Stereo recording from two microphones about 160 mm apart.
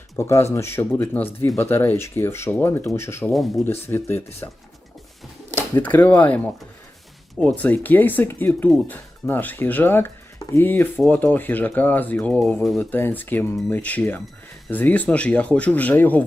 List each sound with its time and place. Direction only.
0.2 s speech: 15° left (ahead or behind)
3.3 s speech: centre (ahead or behind)
3.6 s speech: 15° left (ahead or behind)
4.4 s speech: 25° left (ahead or behind)
5.7 s speech: 10° left (ahead or behind)